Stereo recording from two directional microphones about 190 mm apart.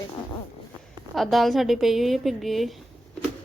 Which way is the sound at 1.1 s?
Centre (ahead or behind).